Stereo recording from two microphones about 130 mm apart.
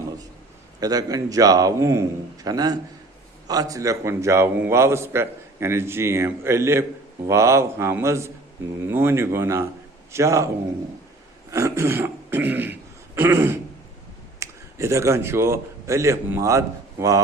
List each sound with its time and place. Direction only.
0.8 s a man's voice: 30° right (ahead or behind)
11.5 s speech: 20° right (ahead or behind)